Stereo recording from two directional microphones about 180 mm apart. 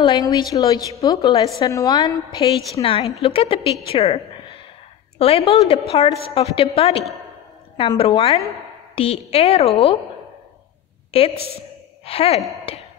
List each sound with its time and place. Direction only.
0.0 s a woman's voice: 25° left (ahead or behind)
11.1 s a woman's voice: 35° left (ahead or behind)